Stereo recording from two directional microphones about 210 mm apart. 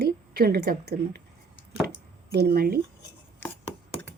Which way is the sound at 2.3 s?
50° right (ahead or behind).